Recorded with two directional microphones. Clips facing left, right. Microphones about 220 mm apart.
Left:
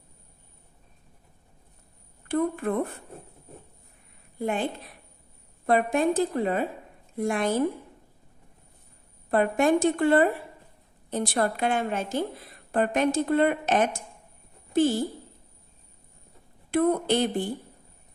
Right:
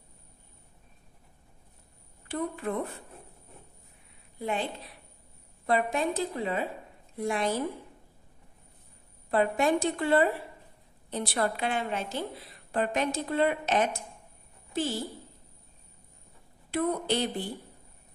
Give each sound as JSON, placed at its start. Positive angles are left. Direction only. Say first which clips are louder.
{"t": 2.2, "sound": "a woman's voice", "louder": "left 7 dB", "side_deg": 50}
{"t": 4.4, "sound": "a woman's voice", "louder": "left 4 dB", "side_deg": 50}
{"t": 5.7, "sound": "a woman's voice", "louder": "left 5 dB", "side_deg": 50}
{"t": 9.3, "sound": "a woman's voice", "louder": "left 4 dB", "side_deg": 50}
{"t": 16.7, "sound": "a woman's voice", "louder": "left 6 dB", "side_deg": 50}